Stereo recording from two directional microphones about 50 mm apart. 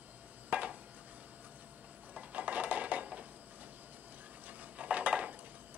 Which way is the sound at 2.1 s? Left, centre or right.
Right.